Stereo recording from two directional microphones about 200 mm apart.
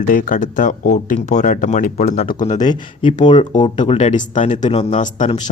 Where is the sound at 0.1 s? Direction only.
40° left (ahead or behind).